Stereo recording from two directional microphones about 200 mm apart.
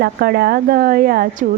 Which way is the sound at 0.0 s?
50° right (ahead or behind).